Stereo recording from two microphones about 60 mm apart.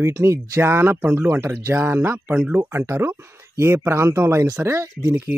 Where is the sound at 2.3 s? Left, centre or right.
Right.